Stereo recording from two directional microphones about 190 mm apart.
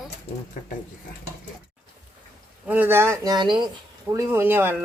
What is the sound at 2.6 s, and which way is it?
Speech, 10° right (ahead or behind).